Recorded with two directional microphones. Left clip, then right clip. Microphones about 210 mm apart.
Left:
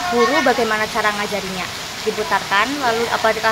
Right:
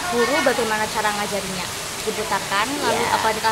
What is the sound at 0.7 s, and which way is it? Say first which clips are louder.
Speech: left 3 dB; 20° left (ahead or behind).